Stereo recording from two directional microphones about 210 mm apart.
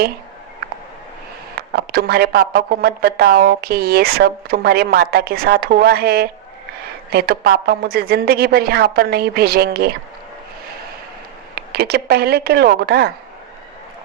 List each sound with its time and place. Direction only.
1.5 s speech: 45° right (ahead or behind)
11.5 s speech: 50° right (ahead or behind)